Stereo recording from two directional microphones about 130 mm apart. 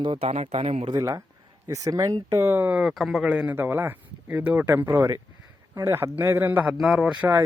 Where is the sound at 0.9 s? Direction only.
30° right (ahead or behind); by 7.3 s 5° right (ahead or behind).